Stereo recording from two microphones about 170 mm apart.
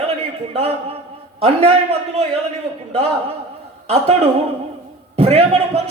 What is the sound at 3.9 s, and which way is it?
A man's voice, 35° right (ahead or behind).